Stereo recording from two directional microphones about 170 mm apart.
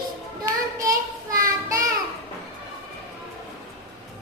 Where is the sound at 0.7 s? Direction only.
20° right (ahead or behind).